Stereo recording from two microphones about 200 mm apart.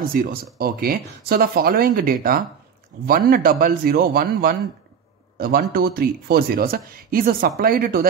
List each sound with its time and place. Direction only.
0.1 s speech: 45° right (ahead or behind)